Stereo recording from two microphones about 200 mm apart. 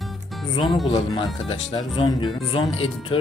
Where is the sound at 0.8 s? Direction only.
30° left (ahead or behind).